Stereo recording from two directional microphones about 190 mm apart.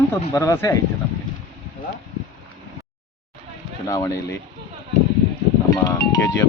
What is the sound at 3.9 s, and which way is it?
Speech, 15° left (ahead or behind).